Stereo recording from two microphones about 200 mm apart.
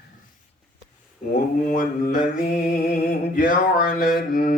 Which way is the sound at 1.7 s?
45° left (ahead or behind).